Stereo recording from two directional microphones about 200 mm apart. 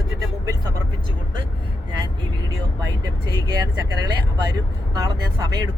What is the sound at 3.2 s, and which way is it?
Speech, 20° right (ahead or behind).